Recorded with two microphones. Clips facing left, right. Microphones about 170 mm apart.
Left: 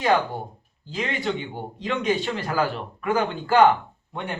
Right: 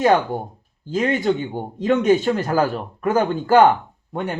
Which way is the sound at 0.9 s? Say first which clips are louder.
Right 8 dB; 45° right (ahead or behind).